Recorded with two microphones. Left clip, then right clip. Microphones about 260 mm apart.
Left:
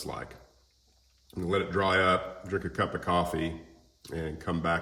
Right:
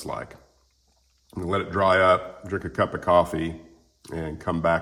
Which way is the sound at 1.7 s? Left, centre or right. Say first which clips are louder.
Right 8 dB; centre.